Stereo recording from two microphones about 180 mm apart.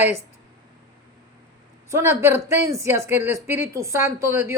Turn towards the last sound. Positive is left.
turn(degrees=-15)  # may be behind; listen again after turning